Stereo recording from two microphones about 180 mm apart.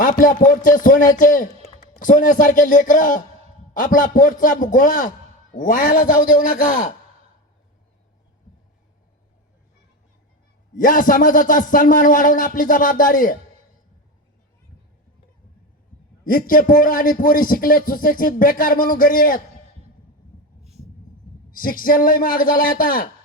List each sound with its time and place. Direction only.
0.0 s a man's voice: 50° left (ahead or behind)
10.8 s a man's voice: 50° left (ahead or behind)
16.2 s a man's voice: 50° left (ahead or behind)
21.5 s a man's voice: 50° left (ahead or behind)